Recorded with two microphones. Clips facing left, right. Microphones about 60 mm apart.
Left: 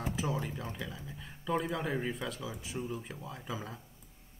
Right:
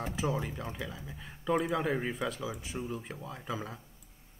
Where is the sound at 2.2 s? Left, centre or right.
Centre.